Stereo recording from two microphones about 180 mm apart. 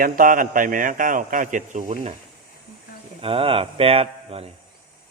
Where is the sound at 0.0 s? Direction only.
50° right (ahead or behind).